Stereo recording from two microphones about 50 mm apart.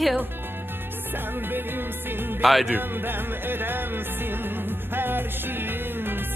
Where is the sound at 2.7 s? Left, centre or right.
Right.